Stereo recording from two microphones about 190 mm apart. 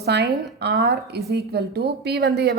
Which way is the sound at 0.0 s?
60° right (ahead or behind).